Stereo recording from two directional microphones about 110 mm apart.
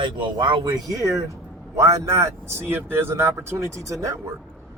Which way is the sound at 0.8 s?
30° right (ahead or behind).